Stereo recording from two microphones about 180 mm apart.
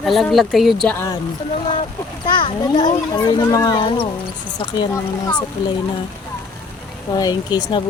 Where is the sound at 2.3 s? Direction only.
25° left (ahead or behind).